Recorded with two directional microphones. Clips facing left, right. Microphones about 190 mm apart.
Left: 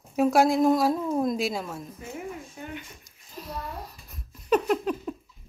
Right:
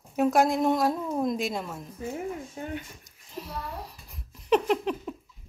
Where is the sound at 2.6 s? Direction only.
35° right (ahead or behind).